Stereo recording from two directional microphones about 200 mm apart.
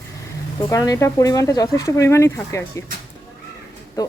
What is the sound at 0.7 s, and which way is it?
Speech, 15° left (ahead or behind).